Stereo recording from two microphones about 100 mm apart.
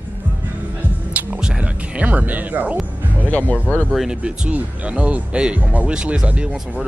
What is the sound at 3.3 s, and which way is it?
Speech, 15° left (ahead or behind).